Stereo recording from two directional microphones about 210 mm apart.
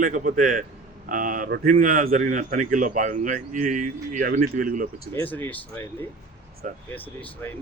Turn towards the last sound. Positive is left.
turn(degrees=10)  # may be behind; listen again after turning